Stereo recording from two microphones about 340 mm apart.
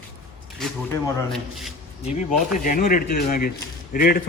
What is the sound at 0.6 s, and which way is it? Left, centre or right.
Speech, centre.